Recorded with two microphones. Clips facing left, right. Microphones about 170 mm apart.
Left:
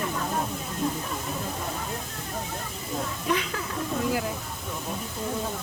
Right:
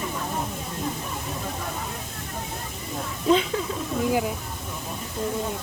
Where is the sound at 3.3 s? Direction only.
25° right (ahead or behind).